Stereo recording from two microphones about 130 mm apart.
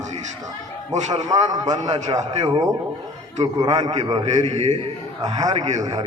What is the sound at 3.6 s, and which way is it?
Speech, 30° right (ahead or behind).